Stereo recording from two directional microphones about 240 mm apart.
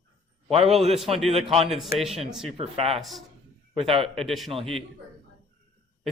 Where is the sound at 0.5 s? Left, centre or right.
Right.